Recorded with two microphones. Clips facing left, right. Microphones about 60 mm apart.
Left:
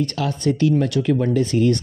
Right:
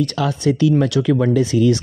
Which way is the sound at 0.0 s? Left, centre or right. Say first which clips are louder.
Right 3 dB; right.